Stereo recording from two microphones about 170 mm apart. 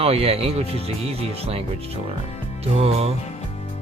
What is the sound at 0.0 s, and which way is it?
Speech, 35° right (ahead or behind).